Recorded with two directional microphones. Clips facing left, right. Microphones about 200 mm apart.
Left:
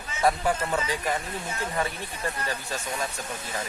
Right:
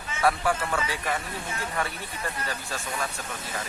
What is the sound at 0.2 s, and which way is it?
Speech, 20° left (ahead or behind).